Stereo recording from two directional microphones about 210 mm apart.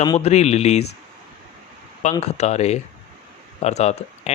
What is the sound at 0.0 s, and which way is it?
Speech, 25° left (ahead or behind).